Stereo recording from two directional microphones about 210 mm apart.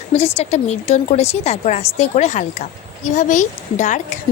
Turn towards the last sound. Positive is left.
turn(degrees=35)  # may be behind; listen again after turning